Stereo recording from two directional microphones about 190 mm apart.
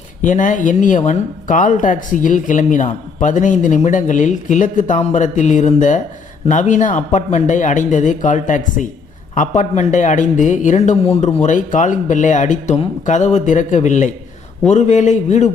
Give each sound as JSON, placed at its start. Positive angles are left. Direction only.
{"t": 0.2, "sound": "speech", "side_deg": 40}